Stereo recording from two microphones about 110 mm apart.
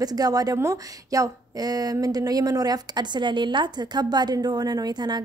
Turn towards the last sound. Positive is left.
turn(degrees=-40)  # may be behind; listen again after turning